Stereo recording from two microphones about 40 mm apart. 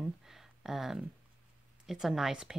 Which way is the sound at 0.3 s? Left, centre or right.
Centre.